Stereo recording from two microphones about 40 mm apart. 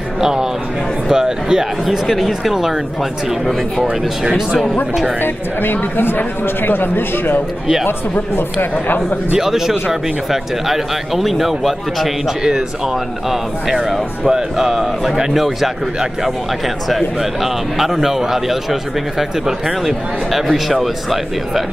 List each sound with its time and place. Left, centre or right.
0.2 s speech: centre
1.9 s a man's voice: centre
4.2 s speech: centre
5.2 s speech: left
9.4 s speech: centre
13.3 s a man's voice: centre